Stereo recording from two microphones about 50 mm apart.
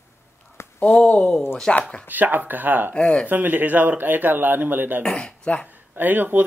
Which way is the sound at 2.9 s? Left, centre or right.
Centre.